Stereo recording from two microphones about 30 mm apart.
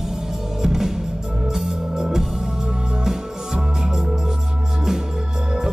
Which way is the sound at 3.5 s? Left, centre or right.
Right.